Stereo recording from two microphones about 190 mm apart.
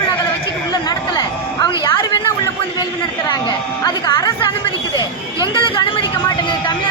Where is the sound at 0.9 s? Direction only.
20° left (ahead or behind).